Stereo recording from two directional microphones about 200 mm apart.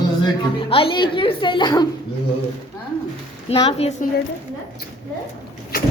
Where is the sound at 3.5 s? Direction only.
30° left (ahead or behind).